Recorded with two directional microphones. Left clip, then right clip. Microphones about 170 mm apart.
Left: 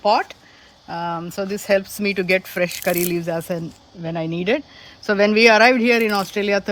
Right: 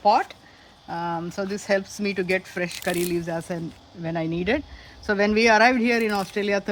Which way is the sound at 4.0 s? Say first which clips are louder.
Left 2 dB; 35° left (ahead or behind).